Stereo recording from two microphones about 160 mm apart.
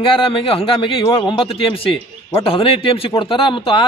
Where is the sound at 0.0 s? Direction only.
35° left (ahead or behind).